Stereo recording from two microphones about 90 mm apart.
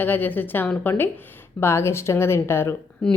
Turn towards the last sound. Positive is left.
turn(degrees=5)  # may be behind; listen again after turning